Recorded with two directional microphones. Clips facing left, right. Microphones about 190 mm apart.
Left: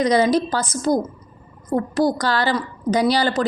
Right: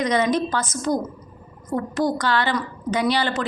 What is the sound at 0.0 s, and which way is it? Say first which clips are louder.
A woman's voice: left 4 dB; 35° left (ahead or behind).